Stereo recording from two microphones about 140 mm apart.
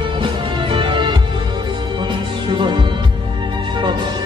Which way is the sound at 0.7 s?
35° right (ahead or behind).